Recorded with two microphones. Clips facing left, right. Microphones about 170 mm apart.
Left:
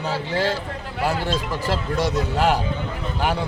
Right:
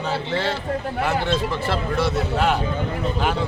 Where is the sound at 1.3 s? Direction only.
40° left (ahead or behind).